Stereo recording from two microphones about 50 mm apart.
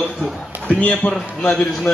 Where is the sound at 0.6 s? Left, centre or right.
Left.